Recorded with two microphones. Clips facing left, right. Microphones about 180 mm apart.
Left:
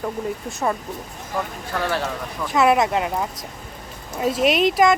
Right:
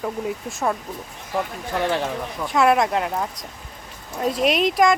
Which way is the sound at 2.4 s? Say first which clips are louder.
Left 1 dB; centre (ahead or behind).